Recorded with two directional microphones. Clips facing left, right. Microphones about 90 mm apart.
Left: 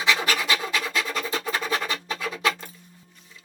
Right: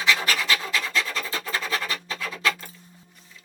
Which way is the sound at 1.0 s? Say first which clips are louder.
Left 3 dB; 30° left (ahead or behind).